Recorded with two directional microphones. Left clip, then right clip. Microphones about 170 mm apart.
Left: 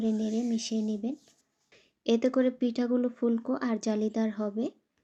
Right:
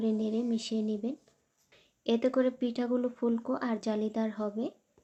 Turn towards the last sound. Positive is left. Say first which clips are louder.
# left 2 dB
turn(degrees=20)  # may be behind; listen again after turning